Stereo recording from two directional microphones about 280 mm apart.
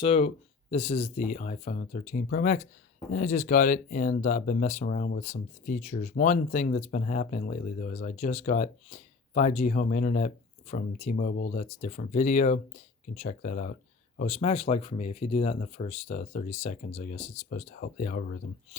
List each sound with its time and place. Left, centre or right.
0.0 s speech: left